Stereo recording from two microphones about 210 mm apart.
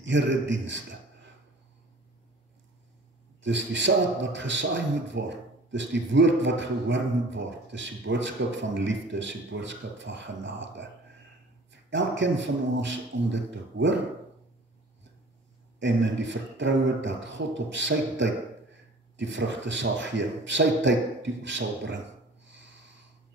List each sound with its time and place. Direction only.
0.0 s a man's voice: 60° right (ahead or behind)
3.4 s a man's voice: 60° right (ahead or behind)
11.9 s a man's voice: 60° right (ahead or behind)
15.8 s a man's voice: 60° right (ahead or behind)